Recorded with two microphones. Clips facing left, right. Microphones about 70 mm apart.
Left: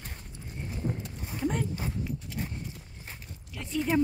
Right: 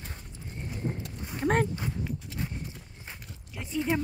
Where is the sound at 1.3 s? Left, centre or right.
Right.